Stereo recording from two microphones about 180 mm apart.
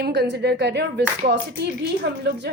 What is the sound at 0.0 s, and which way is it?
A woman's voice, 65° right (ahead or behind).